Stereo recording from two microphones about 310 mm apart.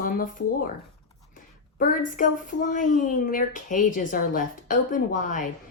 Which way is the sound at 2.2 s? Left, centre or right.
Left.